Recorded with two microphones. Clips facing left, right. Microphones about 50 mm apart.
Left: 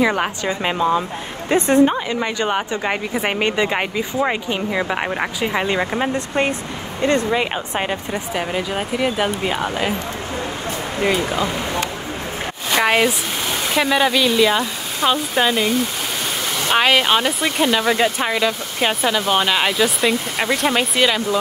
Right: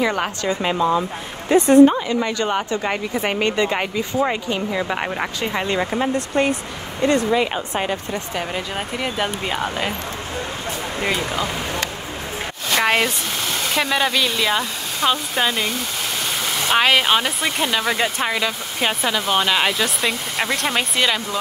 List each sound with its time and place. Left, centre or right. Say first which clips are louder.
0.0 s speech: left 2 dB; centre
0.5 s speech: even; left
1.5 s a woman's voice: right 2 dB; left
1.9 s a woman's voice: right 1 dB; left
2.1 s speech: even; left
8.4 s speech: left 5 dB; centre
11.0 s speech: left 4 dB; centre
12.7 s speech: left 2 dB; centre